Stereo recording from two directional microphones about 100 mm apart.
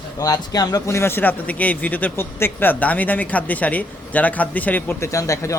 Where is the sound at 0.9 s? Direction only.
25° left (ahead or behind).